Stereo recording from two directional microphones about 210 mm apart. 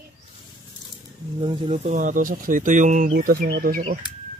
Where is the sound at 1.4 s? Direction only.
25° right (ahead or behind); by 3.8 s 45° right (ahead or behind).